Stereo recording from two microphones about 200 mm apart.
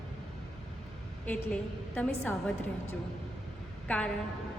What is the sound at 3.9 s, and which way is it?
Speech, 5° left (ahead or behind).